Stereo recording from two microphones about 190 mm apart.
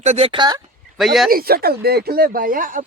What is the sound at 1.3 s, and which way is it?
Speech, 50° right (ahead or behind).